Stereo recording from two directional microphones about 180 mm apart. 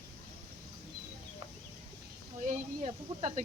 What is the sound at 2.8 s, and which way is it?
Speech, 35° right (ahead or behind).